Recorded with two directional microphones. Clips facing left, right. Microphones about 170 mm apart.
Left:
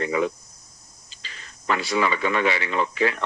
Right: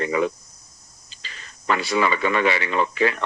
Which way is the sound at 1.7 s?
65° right (ahead or behind).